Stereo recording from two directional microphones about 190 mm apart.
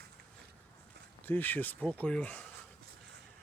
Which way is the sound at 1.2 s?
10° left (ahead or behind).